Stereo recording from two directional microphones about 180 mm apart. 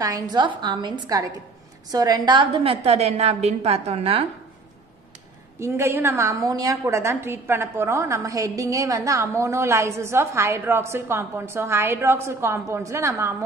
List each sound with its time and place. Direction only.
0.0 s a woman's voice: 20° right (ahead or behind)
5.6 s a woman's voice: 15° right (ahead or behind)